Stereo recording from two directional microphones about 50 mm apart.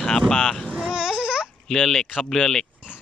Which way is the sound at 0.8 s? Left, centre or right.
Centre.